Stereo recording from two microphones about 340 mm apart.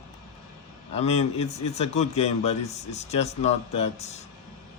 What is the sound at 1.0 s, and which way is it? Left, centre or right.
A man's voice, centre.